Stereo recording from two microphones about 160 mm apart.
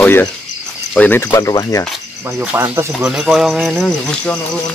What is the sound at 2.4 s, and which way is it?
Speech, 15° right (ahead or behind).